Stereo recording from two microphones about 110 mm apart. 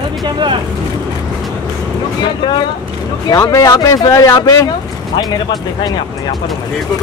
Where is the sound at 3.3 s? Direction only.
30° left (ahead or behind).